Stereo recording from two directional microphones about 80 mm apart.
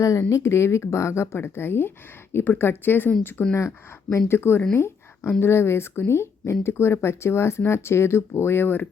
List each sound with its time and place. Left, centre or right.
0.0 s speech: left
4.7 s a sound: left
5.4 s speech: left